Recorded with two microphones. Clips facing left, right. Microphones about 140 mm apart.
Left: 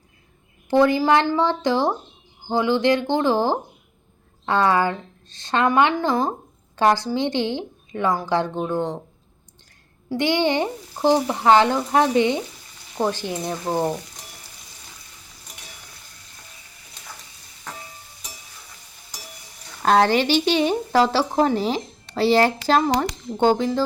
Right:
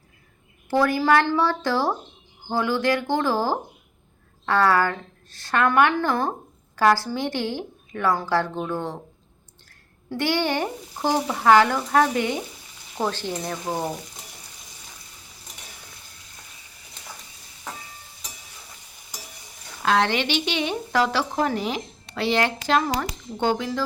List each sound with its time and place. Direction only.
0.7 s speech: 20° left (ahead or behind)
10.1 s speech: 20° left (ahead or behind)
13.0 s frying: 15° left (ahead or behind)
13.4 s speech: 20° left (ahead or behind)
19.8 s speech: 40° left (ahead or behind)